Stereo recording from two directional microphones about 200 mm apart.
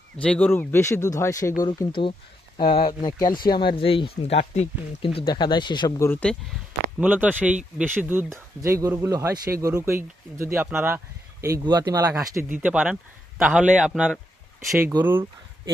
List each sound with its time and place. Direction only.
0.2 s speech: 5° left (ahead or behind); by 6.1 s 20° left (ahead or behind)
6.1 s a man's voice: 5° left (ahead or behind)
7.0 s a man's voice: 10° right (ahead or behind)